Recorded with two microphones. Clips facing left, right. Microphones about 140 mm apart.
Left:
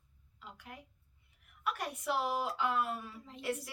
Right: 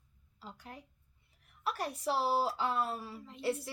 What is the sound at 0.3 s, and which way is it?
A woman's voice, 35° right (ahead or behind).